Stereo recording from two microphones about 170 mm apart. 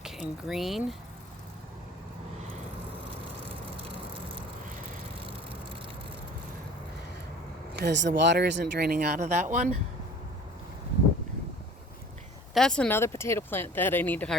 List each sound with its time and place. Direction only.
0.0 s speech: centre (ahead or behind)
7.7 s speech: 90° right; by 9.2 s 60° right (ahead or behind)
9.2 s speech: 45° right (ahead or behind)
12.5 s speech: 5° left (ahead or behind)